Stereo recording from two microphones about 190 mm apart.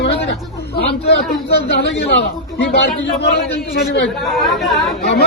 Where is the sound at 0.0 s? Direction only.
65° left (ahead or behind).